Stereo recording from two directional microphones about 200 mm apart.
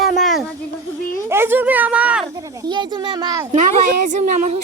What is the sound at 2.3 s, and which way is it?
A child's voice, 15° right (ahead or behind).